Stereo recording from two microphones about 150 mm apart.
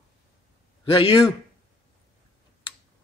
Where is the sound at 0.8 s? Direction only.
35° left (ahead or behind).